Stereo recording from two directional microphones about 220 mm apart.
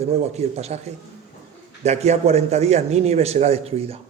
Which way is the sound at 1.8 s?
30° right (ahead or behind).